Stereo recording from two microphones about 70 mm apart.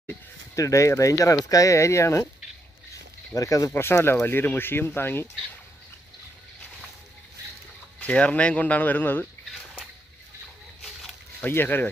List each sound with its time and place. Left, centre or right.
0.6 s speech: left
3.3 s speech: left
3.7 s speech: left
8.0 s speech: centre
11.4 s speech: left